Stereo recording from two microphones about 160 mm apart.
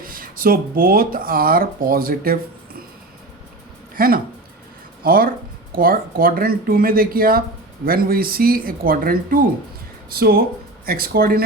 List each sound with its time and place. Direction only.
0.0 s speech: 65° right (ahead or behind)
3.9 s speech: 65° right (ahead or behind)